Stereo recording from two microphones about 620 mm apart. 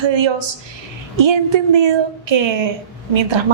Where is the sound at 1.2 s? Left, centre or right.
Right.